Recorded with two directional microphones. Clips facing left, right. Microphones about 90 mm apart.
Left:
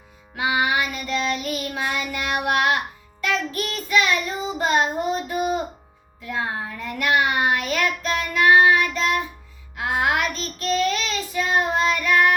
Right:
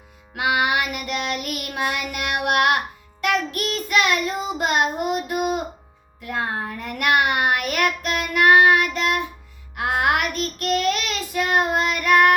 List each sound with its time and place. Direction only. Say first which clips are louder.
0.3 s child singing: right 1 dB; 65° right (ahead or behind)
6.2 s child singing: right 1 dB; 55° right (ahead or behind)